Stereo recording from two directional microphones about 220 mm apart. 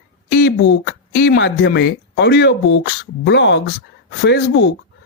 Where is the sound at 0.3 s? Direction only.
50° left (ahead or behind).